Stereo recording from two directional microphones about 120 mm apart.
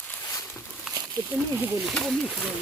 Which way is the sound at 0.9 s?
5° right (ahead or behind).